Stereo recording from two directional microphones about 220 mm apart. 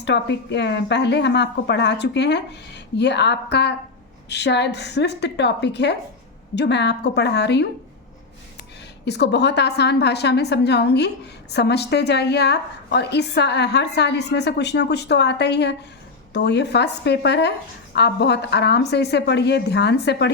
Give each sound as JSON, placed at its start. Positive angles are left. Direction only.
{"t": 0.0, "sound": "a woman's voice", "side_deg": 50}
{"t": 9.0, "sound": "a woman's voice", "side_deg": 50}